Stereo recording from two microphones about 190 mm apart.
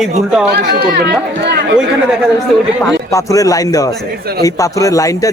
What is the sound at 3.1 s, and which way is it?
Speech, 15° left (ahead or behind).